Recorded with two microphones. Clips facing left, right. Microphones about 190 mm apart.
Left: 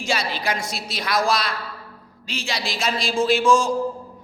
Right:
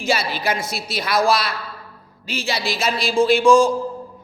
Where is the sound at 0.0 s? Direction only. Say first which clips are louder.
Right 3 dB; 5° right (ahead or behind).